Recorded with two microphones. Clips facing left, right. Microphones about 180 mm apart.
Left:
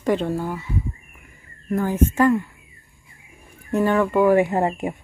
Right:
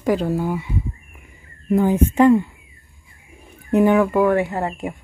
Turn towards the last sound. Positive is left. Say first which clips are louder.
# left 3 dB
turn(degrees=20)  # may be behind; listen again after turning